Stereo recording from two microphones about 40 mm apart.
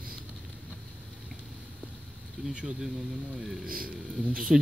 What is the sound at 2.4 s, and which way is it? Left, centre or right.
Bee, centre.